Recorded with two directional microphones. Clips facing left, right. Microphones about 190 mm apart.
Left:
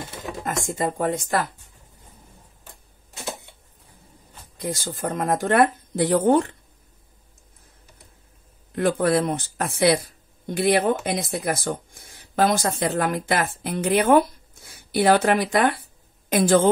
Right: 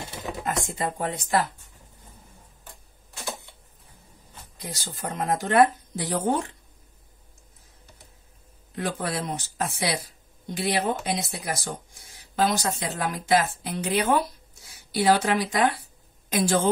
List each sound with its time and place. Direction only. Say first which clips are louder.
0.5 s speech: left 4 dB; 45° left (ahead or behind)
4.6 s speech: left 8 dB; 50° left (ahead or behind)
8.7 s speech: left 9 dB; 55° left (ahead or behind)